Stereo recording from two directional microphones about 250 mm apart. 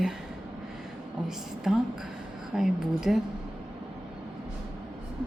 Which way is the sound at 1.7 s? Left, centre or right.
Centre.